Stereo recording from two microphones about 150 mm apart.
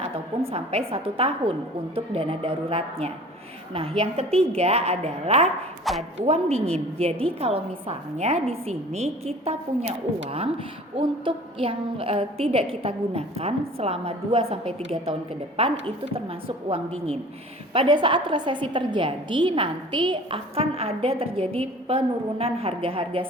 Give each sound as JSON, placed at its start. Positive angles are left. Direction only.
{"t": 0.0, "sound": "a woman's voice", "side_deg": -45}
{"t": 16.6, "sound": "a woman's voice", "side_deg": -40}